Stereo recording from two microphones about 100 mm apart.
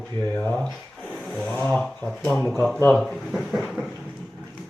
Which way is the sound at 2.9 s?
Centre (ahead or behind).